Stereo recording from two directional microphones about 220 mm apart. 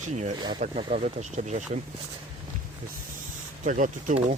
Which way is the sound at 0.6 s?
35° right (ahead or behind).